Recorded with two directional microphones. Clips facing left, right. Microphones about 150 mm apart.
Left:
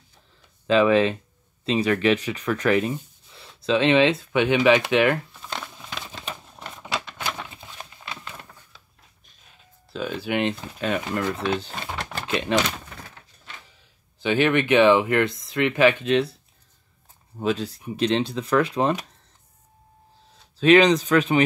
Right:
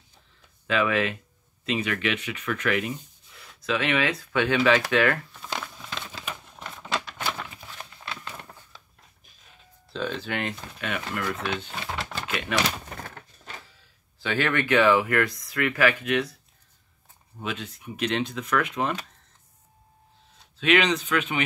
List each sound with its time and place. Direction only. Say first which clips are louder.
0.7 s speech: left 7 dB; 30° left (ahead or behind)
5.3 s crumpling: even; centre (ahead or behind)
5.6 s a sound: even; 5° left (ahead or behind)
9.9 s speech: left 4 dB; 10° left (ahead or behind)
10.8 s speech: left 5 dB; 30° left (ahead or behind)
14.2 s speech: left 5 dB; 20° left (ahead or behind)
17.4 s speech: left 9 dB; 35° left (ahead or behind)
20.5 s speech: left 7 dB; 35° left (ahead or behind)